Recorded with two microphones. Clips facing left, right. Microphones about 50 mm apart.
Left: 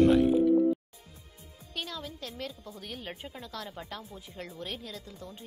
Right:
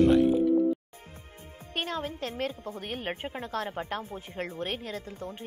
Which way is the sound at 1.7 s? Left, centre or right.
Right.